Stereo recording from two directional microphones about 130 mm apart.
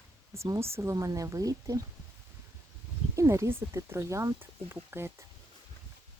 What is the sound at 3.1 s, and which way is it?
Speech, 25° right (ahead or behind).